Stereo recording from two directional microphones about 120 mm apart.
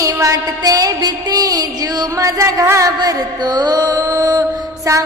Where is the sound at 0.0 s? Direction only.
25° right (ahead or behind).